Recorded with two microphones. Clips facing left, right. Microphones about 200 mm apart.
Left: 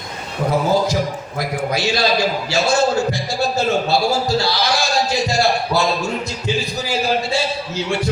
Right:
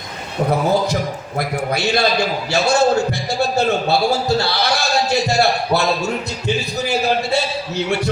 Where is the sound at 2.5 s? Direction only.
60° right (ahead or behind).